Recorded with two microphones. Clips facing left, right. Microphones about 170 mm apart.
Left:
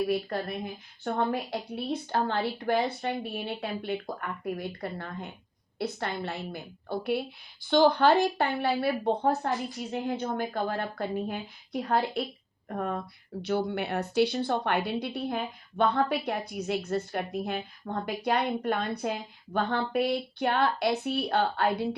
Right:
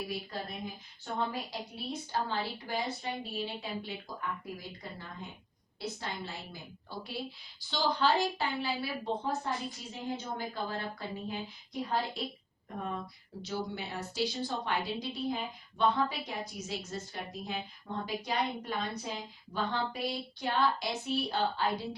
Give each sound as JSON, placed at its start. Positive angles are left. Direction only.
{"t": 0.0, "sound": "a woman's voice", "side_deg": 65}